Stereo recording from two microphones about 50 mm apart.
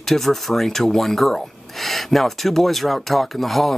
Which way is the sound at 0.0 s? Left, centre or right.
Centre.